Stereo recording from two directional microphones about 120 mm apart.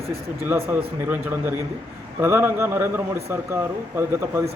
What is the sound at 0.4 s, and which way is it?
A man's voice, 15° right (ahead or behind).